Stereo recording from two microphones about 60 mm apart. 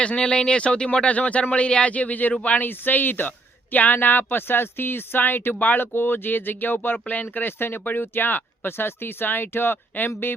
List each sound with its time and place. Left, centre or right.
0.0 s speech: centre
2.6 s speech: left